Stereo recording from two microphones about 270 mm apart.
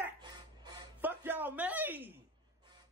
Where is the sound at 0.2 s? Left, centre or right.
Centre.